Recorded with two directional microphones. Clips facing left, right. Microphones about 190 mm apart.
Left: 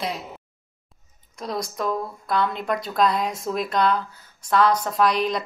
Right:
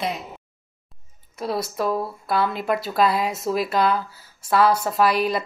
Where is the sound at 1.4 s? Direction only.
5° right (ahead or behind).